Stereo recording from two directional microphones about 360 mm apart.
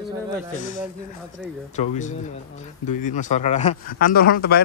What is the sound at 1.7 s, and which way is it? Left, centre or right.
Speech, centre.